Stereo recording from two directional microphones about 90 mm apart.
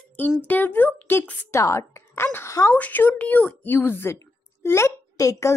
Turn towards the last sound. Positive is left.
turn(degrees=35)  # may be behind; listen again after turning